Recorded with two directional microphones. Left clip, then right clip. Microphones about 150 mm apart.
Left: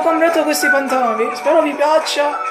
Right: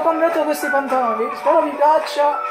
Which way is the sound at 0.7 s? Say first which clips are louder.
Left 3 dB; 30° left (ahead or behind).